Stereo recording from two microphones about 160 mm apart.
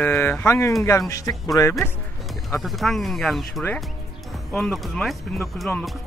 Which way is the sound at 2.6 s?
Centre (ahead or behind).